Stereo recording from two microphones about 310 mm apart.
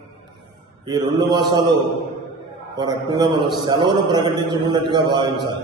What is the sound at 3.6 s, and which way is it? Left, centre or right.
A man's voice, centre.